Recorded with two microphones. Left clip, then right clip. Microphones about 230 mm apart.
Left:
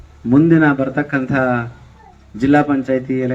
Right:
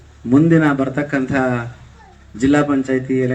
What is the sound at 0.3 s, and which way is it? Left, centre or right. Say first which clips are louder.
A man's voice: left 1 dB; left.